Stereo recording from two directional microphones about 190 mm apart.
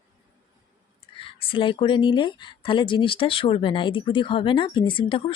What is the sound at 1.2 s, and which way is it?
Speech, 30° left (ahead or behind).